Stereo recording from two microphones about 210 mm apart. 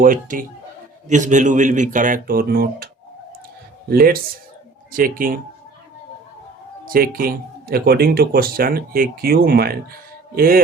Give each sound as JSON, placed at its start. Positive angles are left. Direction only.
{"t": 0.0, "sound": "speech", "side_deg": -40}
{"t": 6.8, "sound": "speech", "side_deg": -45}